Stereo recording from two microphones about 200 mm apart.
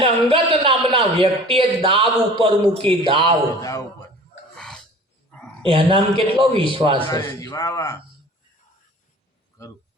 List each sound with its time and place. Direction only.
0.0 s a man's voice: 25° right (ahead or behind)
3.6 s a man's voice: 15° left (ahead or behind)
4.5 s a sound: 5° left (ahead or behind)
5.6 s a man's voice: 25° right (ahead or behind)
7.1 s a man's voice: 20° left (ahead or behind)